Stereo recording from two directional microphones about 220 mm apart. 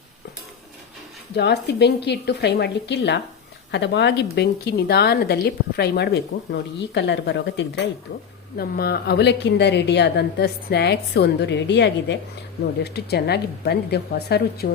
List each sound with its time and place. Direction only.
1.4 s a woman's voice: 50° left (ahead or behind)